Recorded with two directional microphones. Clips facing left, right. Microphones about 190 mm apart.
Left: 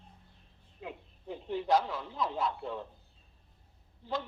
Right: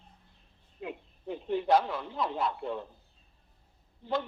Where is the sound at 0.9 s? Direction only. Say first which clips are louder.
Right 4 dB; 65° right (ahead or behind).